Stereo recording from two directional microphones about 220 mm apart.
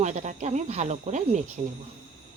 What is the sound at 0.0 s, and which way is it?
Speech, 35° right (ahead or behind).